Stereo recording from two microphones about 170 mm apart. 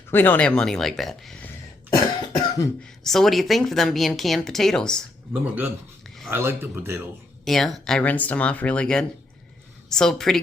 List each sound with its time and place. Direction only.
0.1 s a woman's voice: 10° left (ahead or behind)
1.9 s cough: 25° left (ahead or behind)
3.0 s a woman's voice: centre (ahead or behind)
5.3 s speech: 10° right (ahead or behind)
7.4 s a woman's voice: centre (ahead or behind)